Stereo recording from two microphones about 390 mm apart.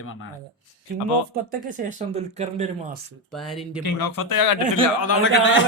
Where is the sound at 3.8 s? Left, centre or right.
Left.